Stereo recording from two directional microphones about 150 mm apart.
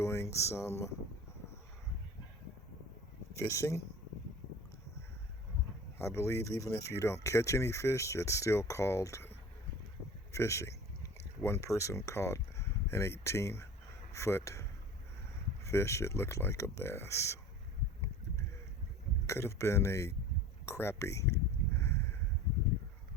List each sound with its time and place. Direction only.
0.0 s speech: 20° left (ahead or behind)
3.3 s speech: 20° left (ahead or behind)
6.0 s speech: 20° left (ahead or behind)
10.3 s a sound: 20° left (ahead or behind)
11.4 s speech: 20° left (ahead or behind)
15.6 s speech: 20° left (ahead or behind)
19.3 s speech: 20° left (ahead or behind)
20.7 s a sound: 20° left (ahead or behind)